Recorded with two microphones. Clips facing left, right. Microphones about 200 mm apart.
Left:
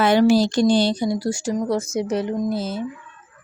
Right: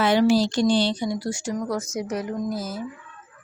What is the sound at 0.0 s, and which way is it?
Speech, 50° left (ahead or behind).